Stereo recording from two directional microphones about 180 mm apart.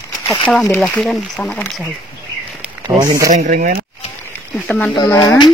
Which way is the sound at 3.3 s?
45° right (ahead or behind).